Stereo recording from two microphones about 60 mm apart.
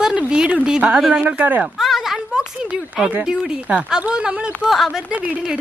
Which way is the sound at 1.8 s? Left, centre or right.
Centre.